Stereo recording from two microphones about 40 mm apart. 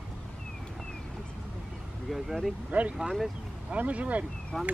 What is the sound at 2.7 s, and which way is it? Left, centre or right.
Speech, right.